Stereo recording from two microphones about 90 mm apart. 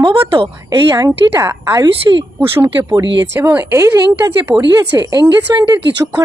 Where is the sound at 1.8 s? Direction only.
55° right (ahead or behind).